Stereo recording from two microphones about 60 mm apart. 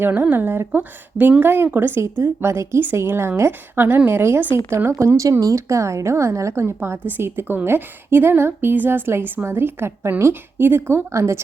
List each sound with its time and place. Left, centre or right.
0.0 s a woman's voice: right
4.9 s a woman's voice: right
5.4 s a woman's voice: right